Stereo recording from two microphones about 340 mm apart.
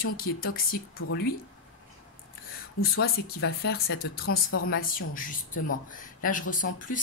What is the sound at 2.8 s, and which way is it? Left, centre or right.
Speech, left.